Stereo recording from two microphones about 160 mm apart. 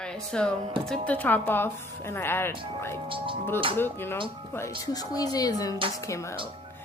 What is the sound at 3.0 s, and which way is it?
Speech, 35° right (ahead or behind).